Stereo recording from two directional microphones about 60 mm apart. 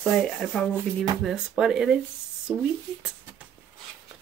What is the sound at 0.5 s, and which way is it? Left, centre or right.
Speech, centre.